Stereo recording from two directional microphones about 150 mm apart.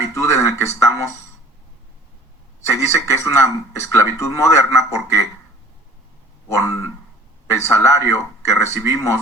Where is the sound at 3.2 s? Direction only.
20° left (ahead or behind).